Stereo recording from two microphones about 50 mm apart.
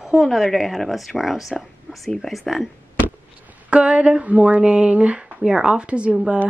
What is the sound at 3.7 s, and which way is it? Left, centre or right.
Speech, right.